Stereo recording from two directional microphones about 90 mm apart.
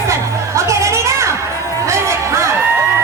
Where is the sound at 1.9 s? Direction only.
35° right (ahead or behind).